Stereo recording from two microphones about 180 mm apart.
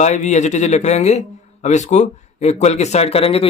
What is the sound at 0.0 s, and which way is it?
Speech, 40° left (ahead or behind).